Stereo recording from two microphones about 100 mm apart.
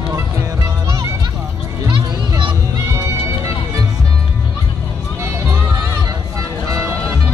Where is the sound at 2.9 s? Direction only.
30° right (ahead or behind).